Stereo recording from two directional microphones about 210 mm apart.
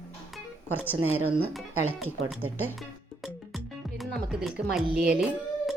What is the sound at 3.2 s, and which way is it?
Music, centre (ahead or behind).